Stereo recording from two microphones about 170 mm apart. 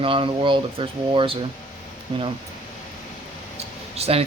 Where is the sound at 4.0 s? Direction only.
35° right (ahead or behind).